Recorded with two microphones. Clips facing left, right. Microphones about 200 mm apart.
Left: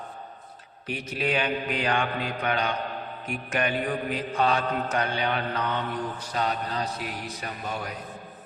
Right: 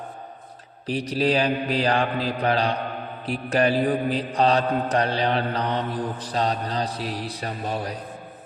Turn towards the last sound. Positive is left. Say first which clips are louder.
# right 5 dB
turn(degrees=-35)  # may be behind; listen again after turning